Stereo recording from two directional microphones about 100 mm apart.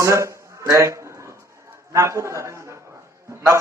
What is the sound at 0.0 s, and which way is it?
A man's voice, 30° right (ahead or behind).